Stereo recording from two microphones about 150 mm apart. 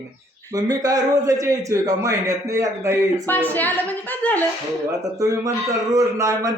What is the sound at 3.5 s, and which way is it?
Speech, 10° left (ahead or behind).